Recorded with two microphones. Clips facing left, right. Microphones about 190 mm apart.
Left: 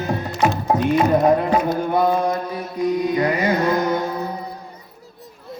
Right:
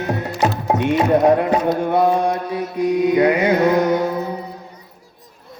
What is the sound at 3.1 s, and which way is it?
Carnatic music, 70° right (ahead or behind).